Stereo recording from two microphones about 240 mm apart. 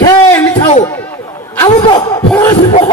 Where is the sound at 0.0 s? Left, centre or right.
Centre.